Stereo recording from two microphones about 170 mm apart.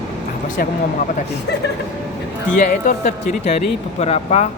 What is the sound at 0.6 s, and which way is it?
Speech, 60° left (ahead or behind).